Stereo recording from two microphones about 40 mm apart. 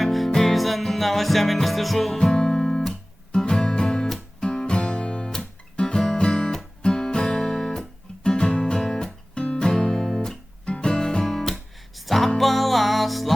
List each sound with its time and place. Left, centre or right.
0.0 s music: centre
2.1 s music: centre
4.4 s guitar: centre
9.3 s music: left
11.3 s guitar: centre
11.9 s music: centre